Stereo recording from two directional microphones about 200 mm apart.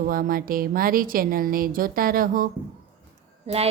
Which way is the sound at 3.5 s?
30° right (ahead or behind).